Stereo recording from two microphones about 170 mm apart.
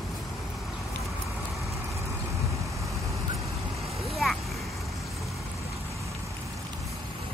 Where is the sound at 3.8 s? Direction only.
Centre (ahead or behind).